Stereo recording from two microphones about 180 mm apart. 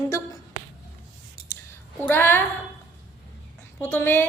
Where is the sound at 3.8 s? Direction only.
10° left (ahead or behind).